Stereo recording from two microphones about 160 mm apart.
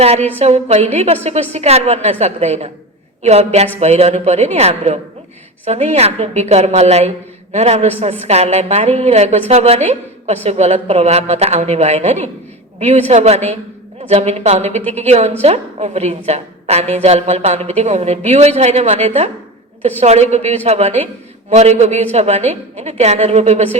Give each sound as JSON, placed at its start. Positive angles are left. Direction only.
{"t": 0.3, "sound": "a woman's voice", "side_deg": -45}